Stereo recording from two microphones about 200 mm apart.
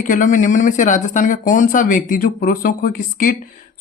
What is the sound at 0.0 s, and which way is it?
Speech, 40° left (ahead or behind).